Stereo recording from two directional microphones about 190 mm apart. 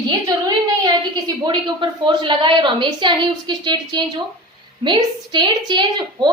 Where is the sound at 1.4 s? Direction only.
25° right (ahead or behind).